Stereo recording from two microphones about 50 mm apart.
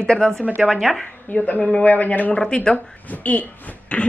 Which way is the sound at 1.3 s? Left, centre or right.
Left.